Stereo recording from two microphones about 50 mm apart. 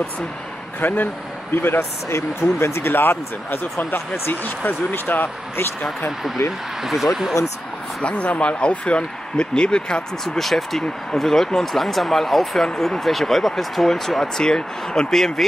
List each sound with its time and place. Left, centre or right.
0.7 s speech: left
1.8 s speech: left
2.9 s speech: left
6.8 s speech: centre
8.0 s speech: left
10.2 s speech: centre